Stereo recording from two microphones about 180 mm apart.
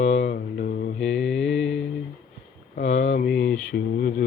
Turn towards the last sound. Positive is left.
turn(degrees=55)  # may be behind; listen again after turning